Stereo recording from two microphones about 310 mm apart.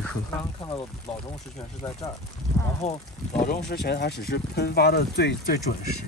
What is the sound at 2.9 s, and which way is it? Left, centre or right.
Speech, left.